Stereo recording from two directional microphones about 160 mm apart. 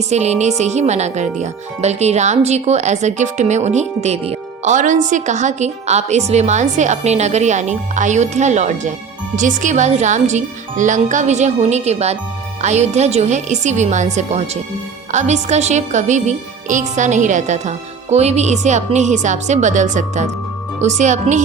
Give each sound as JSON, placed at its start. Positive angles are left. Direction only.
{"t": 0.1, "sound": "speech", "side_deg": -45}